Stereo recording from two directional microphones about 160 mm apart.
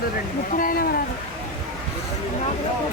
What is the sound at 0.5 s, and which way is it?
Speech, 65° left (ahead or behind).